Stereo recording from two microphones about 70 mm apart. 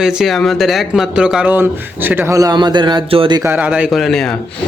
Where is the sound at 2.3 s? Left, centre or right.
Right.